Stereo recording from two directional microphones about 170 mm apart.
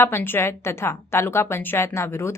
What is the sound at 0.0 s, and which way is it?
A woman's voice, 15° left (ahead or behind).